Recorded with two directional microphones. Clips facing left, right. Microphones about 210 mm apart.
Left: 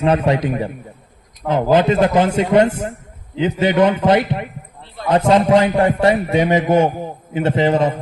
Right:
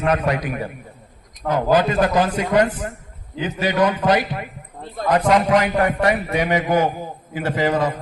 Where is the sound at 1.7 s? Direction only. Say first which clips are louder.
Left 4 dB; 25° left (ahead or behind).